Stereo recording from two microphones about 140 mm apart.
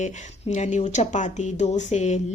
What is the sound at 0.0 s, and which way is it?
Speech, 55° left (ahead or behind).